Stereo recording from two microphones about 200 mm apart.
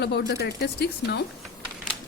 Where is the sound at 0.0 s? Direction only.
55° left (ahead or behind).